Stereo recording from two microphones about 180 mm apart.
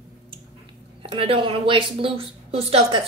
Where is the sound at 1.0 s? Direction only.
30° right (ahead or behind).